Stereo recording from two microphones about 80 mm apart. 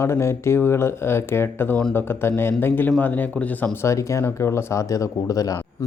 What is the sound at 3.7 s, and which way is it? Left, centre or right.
Speech, left.